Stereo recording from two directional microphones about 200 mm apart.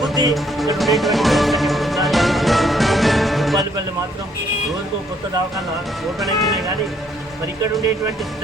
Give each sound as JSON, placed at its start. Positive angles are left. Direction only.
{"t": 0.1, "sound": "music", "side_deg": -20}
{"t": 0.3, "sound": "speech", "side_deg": 0}
{"t": 0.8, "sound": "music", "side_deg": 0}
{"t": 6.1, "sound": "speech", "side_deg": 0}